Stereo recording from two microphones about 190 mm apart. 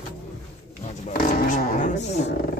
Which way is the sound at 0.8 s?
40° left (ahead or behind).